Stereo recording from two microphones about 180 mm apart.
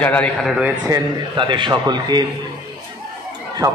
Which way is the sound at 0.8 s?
20° right (ahead or behind).